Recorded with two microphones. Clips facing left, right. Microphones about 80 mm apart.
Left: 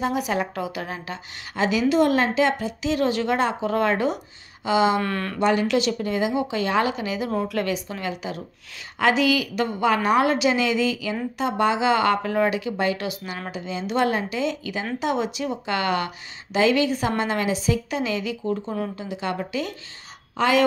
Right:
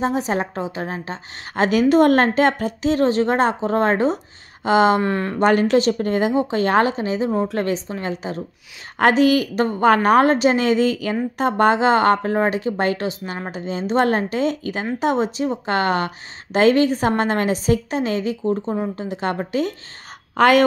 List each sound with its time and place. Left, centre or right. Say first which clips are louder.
0.0 s speech: right 3 dB; right
1.6 s a woman's voice: right 5 dB; right
5.0 s speech: right 5 dB; right
5.4 s a woman's voice: right 5 dB; right
19.0 s a woman's voice: right 4 dB; right
20.3 s a woman's voice: right 6 dB; right